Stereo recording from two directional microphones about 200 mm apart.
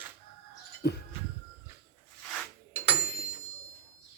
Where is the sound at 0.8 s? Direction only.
55° left (ahead or behind).